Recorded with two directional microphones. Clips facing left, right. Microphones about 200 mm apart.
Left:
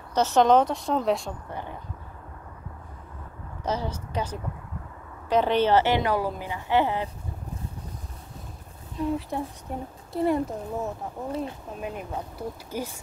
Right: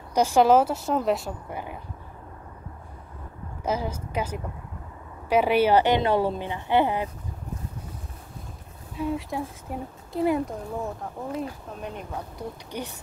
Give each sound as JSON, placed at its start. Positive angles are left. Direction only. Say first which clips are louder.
{"t": 0.1, "sound": "a woman's voice", "louder": "right 1 dB", "side_deg": -10}
{"t": 3.6, "sound": "a woman's voice", "louder": "right 1 dB", "side_deg": -10}
{"t": 8.9, "sound": "speech", "louder": "left 1 dB", "side_deg": 0}